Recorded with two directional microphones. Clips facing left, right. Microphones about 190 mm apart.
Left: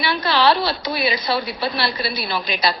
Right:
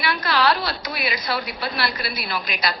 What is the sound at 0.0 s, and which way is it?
Speech, 30° left (ahead or behind).